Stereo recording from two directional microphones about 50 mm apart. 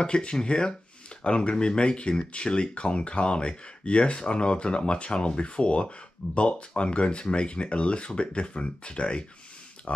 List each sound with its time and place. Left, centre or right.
0.0 s speech: centre